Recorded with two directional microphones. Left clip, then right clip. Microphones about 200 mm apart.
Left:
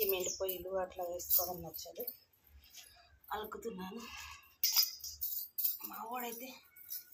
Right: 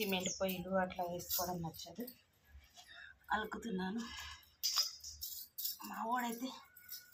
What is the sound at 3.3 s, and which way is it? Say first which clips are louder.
Music: right 2 dB; 15° left (ahead or behind).